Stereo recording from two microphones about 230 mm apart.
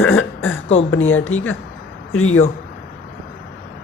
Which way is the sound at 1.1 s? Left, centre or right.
Left.